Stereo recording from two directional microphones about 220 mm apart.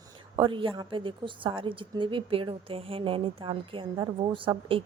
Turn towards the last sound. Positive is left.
turn(degrees=-25)  # may be behind; listen again after turning